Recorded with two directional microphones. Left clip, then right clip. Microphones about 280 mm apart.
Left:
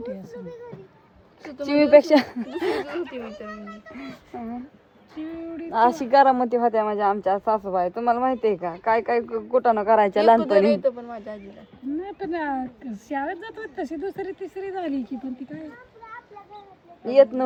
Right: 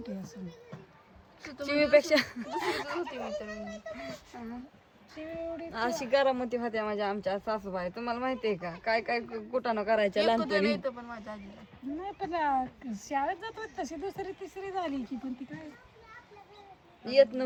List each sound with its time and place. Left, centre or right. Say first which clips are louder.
1.5 s speech: left 8 dB; centre
4.3 s speech: left 9 dB; centre
5.1 s speech: left 4 dB; centre
5.7 s speech: left 12 dB; centre
11.9 s speech: left 4 dB; centre
17.1 s speech: left 7 dB; centre